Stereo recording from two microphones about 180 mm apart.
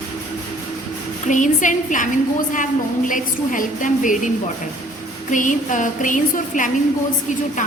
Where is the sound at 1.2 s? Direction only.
45° left (ahead or behind).